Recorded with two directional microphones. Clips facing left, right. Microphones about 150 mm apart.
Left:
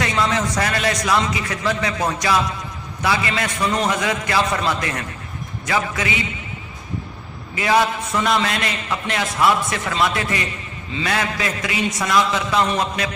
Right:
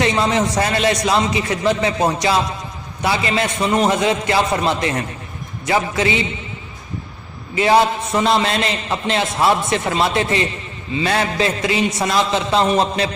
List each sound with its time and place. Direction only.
0.0 s a man's voice: 25° right (ahead or behind)
7.5 s a man's voice: 25° right (ahead or behind)